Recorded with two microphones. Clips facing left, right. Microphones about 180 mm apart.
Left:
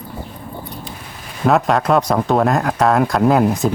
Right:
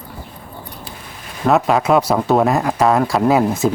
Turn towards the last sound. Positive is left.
turn(degrees=0)  # may be behind; listen again after turning